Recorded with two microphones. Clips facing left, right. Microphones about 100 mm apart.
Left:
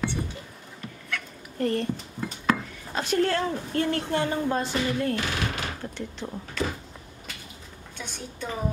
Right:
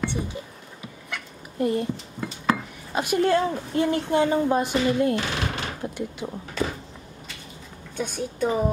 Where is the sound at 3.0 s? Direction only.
15° right (ahead or behind).